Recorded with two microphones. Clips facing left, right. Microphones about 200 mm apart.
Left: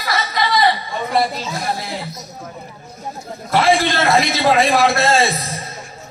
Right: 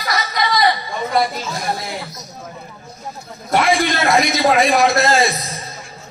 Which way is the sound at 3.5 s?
30° left (ahead or behind).